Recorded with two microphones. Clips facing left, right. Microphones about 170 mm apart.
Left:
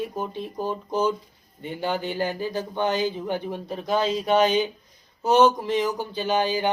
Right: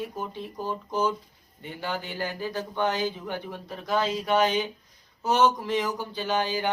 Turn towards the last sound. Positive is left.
turn(degrees=20)  # may be behind; listen again after turning